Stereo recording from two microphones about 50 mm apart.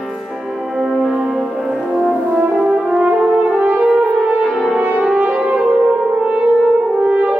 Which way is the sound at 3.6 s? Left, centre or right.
Right.